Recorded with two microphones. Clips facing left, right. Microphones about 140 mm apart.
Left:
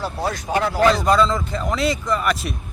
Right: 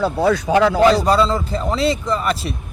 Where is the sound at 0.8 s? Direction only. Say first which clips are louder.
Right 3 dB; 35° right (ahead or behind).